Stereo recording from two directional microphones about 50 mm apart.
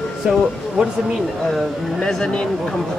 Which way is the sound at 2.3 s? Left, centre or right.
Centre.